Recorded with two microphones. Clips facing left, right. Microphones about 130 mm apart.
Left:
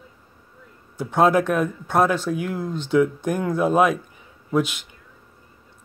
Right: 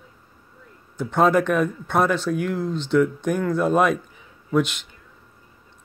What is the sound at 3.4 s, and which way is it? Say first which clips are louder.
Speech: left 1 dB; 10° left (ahead or behind).